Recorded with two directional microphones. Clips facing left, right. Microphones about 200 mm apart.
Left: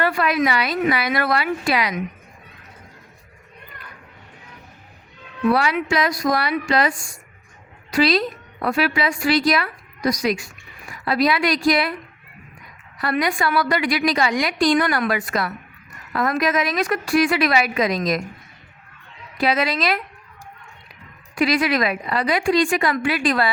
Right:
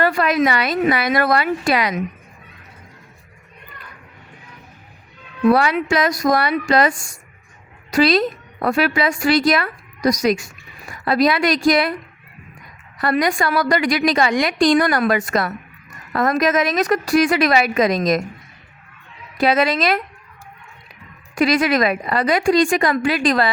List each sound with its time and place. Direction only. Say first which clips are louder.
0.0 s a woman's voice: right 3 dB; 40° right (ahead or behind)
5.5 s a woman's voice: right 4 dB; 45° right (ahead or behind)
13.0 s a woman's voice: right 3 dB; 45° right (ahead or behind)
19.4 s a woman's voice: right 4 dB; 45° right (ahead or behind)
21.3 s a woman's voice: right 3 dB; 45° right (ahead or behind)